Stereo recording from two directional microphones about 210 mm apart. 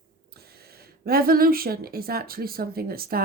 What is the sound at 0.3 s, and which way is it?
A woman's voice, 50° right (ahead or behind).